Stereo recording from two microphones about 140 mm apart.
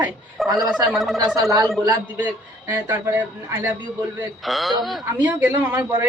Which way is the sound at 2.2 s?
15° right (ahead or behind).